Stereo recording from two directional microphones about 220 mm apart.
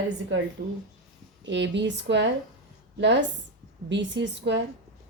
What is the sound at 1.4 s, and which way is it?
Speech, 55° right (ahead or behind).